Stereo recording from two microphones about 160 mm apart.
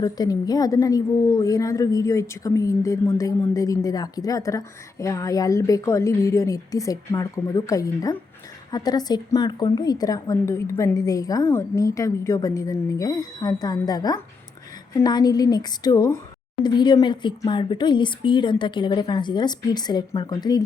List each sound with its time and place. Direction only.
0.0 s a woman's voice: 25° left (ahead or behind)